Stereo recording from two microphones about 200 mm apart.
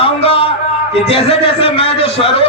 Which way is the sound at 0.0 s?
25° left (ahead or behind).